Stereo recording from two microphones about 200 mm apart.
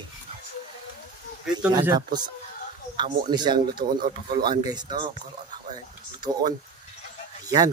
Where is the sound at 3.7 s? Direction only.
45° right (ahead or behind).